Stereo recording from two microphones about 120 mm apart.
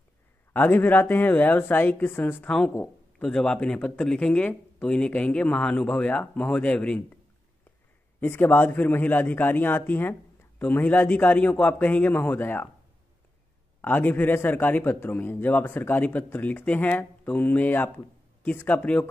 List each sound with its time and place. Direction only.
0.5 s a man's voice: 15° left (ahead or behind)
8.2 s a man's voice: 20° left (ahead or behind)
13.7 s a man's voice: 15° left (ahead or behind)